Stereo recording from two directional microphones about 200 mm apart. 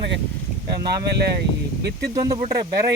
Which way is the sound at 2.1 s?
20° right (ahead or behind).